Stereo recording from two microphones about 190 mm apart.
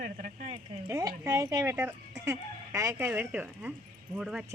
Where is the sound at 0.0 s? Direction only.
40° right (ahead or behind).